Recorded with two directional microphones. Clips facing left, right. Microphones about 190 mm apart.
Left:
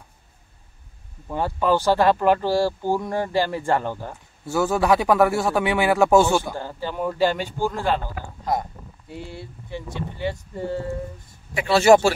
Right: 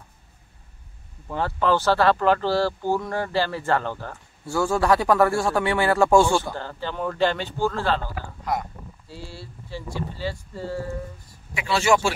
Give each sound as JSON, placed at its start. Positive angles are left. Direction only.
{"t": 1.3, "sound": "speech", "side_deg": 10}
{"t": 8.5, "sound": "speech", "side_deg": 25}
{"t": 11.5, "sound": "speech", "side_deg": 40}